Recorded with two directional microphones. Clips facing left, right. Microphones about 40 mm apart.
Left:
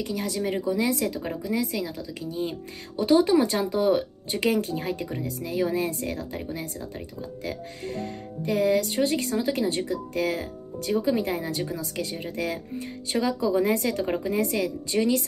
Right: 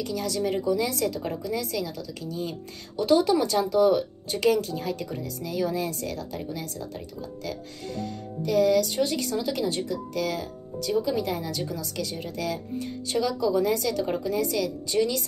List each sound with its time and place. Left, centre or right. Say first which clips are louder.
0.0 s speech: even; left
7.4 s speech: left 3 dB; left